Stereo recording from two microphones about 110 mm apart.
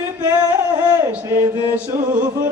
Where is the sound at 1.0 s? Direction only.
20° right (ahead or behind).